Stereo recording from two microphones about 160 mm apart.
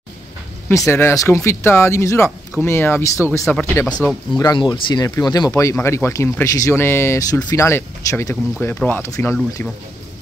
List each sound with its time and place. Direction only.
0.7 s speech: 15° left (ahead or behind)
4.0 s speech: centre (ahead or behind)
4.4 s speech: 25° left (ahead or behind)